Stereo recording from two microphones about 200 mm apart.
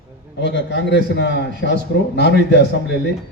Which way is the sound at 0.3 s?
60° left (ahead or behind).